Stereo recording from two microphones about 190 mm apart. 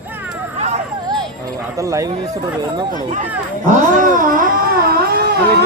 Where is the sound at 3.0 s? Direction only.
40° right (ahead or behind).